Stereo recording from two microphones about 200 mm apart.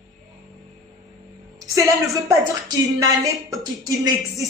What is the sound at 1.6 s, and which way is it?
A woman's voice, 15° right (ahead or behind).